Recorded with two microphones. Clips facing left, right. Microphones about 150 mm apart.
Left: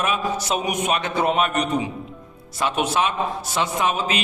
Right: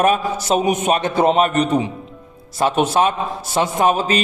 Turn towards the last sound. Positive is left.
turn(degrees=-35)  # may be behind; listen again after turning